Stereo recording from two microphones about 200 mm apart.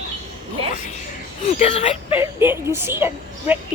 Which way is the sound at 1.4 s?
35° left (ahead or behind).